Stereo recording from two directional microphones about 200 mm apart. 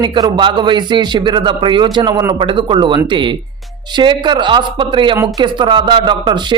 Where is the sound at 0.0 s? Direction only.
20° right (ahead or behind).